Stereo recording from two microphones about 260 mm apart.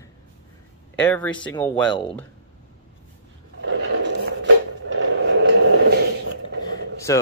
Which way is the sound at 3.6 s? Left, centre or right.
Right.